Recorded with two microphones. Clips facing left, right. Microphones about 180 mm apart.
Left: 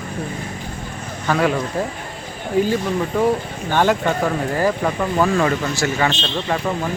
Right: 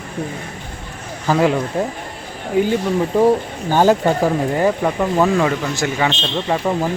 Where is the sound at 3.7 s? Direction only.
35° right (ahead or behind).